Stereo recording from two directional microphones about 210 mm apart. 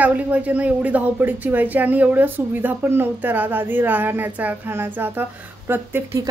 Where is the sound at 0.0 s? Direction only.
5° right (ahead or behind).